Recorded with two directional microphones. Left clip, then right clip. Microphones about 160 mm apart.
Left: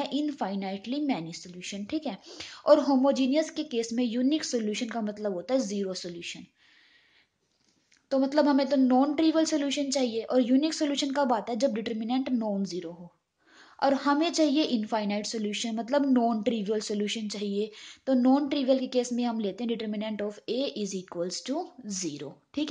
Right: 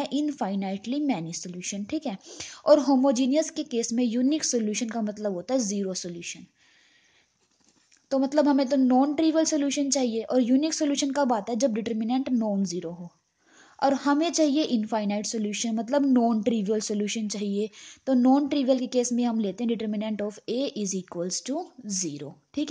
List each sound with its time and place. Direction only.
0.0 s speech: 40° right (ahead or behind)
8.1 s speech: 40° right (ahead or behind)